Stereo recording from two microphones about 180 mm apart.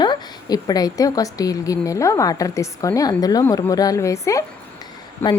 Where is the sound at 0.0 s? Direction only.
20° left (ahead or behind).